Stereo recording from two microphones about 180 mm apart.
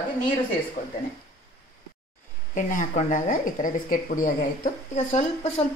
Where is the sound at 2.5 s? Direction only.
45° left (ahead or behind).